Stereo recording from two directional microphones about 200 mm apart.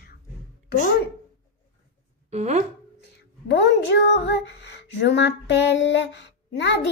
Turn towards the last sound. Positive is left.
turn(degrees=60)  # may be behind; listen again after turning